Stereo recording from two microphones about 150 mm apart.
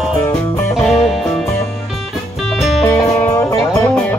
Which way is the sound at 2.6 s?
Centre (ahead or behind).